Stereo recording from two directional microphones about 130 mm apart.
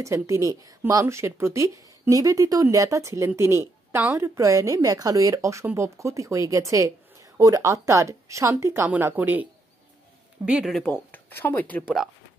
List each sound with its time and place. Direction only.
0.0 s speech: 25° right (ahead or behind); by 10.9 s centre (ahead or behind)
10.9 s speech: 15° left (ahead or behind)